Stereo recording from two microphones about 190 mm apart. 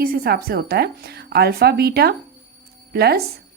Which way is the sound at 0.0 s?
50° right (ahead or behind).